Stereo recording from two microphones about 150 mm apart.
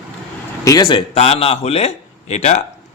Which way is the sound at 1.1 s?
40° left (ahead or behind).